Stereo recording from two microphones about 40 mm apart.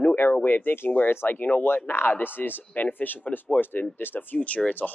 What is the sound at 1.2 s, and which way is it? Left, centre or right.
Speech, left.